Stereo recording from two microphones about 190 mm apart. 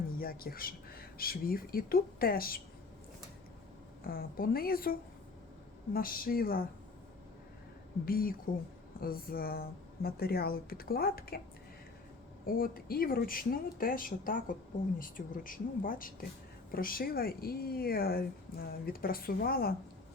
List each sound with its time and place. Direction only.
0.2 s speech: 50° left (ahead or behind)
4.0 s speech: 50° left (ahead or behind)
8.0 s speech: 50° left (ahead or behind)
12.5 s speech: 50° left (ahead or behind)